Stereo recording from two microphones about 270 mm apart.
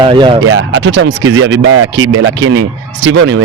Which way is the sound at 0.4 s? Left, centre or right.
Right.